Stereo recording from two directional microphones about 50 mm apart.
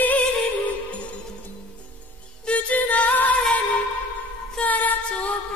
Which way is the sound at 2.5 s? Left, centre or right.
Left.